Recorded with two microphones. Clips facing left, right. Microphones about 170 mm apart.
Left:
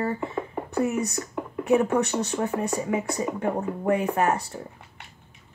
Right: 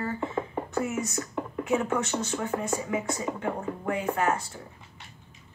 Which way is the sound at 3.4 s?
35° left (ahead or behind).